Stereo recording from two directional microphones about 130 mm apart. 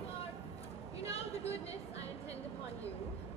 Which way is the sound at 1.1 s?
50° left (ahead or behind).